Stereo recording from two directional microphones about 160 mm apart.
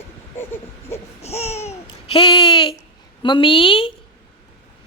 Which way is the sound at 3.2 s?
30° left (ahead or behind).